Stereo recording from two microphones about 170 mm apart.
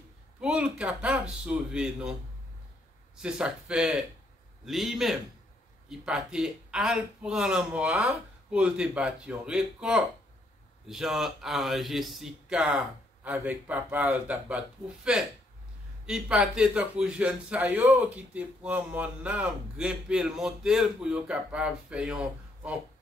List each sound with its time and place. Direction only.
0.4 s a man's voice: 5° right (ahead or behind)
3.2 s a man's voice: 5° right (ahead or behind)
16.1 s a man's voice: 5° right (ahead or behind)